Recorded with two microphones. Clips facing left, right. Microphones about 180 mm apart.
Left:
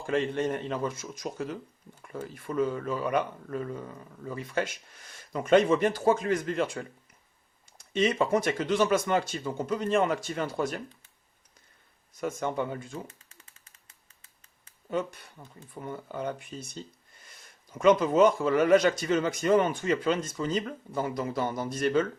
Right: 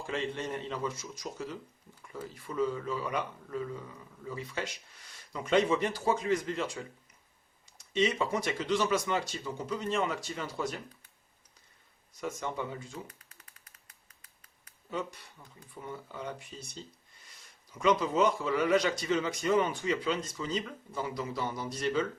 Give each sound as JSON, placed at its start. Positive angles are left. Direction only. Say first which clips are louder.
{"t": 0.0, "sound": "speech", "louder": "left 7 dB", "side_deg": 50}
{"t": 12.2, "sound": "speech", "louder": "left 5 dB", "side_deg": 55}
{"t": 13.1, "sound": "a sound", "louder": "left 1 dB", "side_deg": 25}
{"t": 14.8, "sound": "speech", "louder": "left 6 dB", "side_deg": 55}